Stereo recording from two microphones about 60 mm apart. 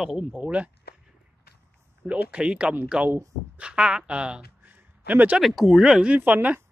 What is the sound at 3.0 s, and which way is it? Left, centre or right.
Speech, right.